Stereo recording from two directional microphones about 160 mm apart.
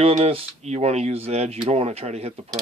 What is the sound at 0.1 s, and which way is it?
Speech, 40° right (ahead or behind).